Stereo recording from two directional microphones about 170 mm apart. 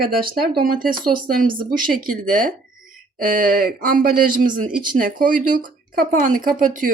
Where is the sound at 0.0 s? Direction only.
60° right (ahead or behind).